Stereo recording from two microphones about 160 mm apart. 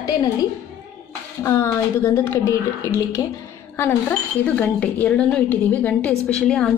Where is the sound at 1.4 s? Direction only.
20° left (ahead or behind).